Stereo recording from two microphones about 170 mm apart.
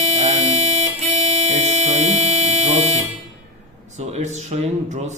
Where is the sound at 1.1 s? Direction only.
40° right (ahead or behind).